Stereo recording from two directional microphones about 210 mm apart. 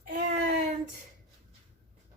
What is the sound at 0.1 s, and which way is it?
Child singing, 40° right (ahead or behind).